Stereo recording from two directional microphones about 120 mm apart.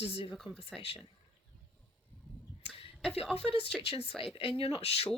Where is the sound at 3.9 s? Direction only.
50° left (ahead or behind).